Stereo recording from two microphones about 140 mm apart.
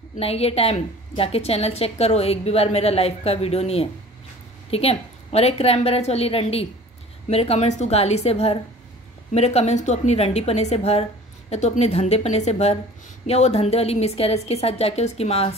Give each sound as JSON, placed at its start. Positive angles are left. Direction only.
{"t": 0.2, "sound": "a woman's voice", "side_deg": 45}